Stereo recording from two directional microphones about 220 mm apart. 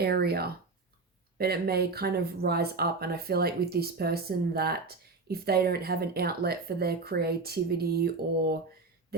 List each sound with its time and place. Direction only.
0.0 s speech: 45° right (ahead or behind)